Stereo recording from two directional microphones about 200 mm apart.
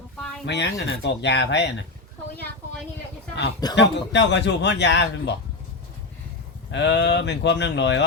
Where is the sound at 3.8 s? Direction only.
60° left (ahead or behind).